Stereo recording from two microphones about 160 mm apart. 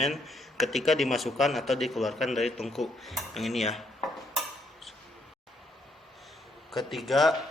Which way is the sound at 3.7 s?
Centre (ahead or behind).